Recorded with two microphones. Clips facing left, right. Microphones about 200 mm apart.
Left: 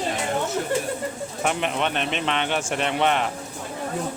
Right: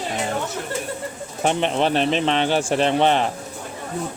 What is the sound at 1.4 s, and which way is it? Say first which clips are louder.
Speech: right 5 dB; 30° right (ahead or behind).